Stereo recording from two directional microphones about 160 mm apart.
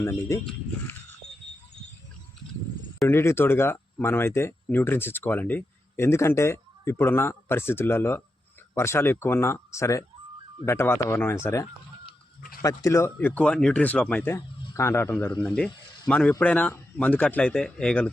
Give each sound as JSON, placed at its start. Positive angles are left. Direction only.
{"t": 0.0, "sound": "speech", "side_deg": 15}
{"t": 3.1, "sound": "speech", "side_deg": 15}
{"t": 12.6, "sound": "speech", "side_deg": 20}